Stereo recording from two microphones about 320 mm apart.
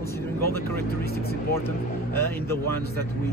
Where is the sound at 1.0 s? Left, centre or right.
Left.